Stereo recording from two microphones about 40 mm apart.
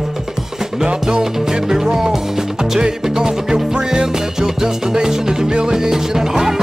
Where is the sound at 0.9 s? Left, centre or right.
Right.